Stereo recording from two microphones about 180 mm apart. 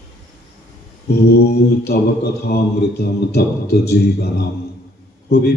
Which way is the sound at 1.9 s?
60° left (ahead or behind).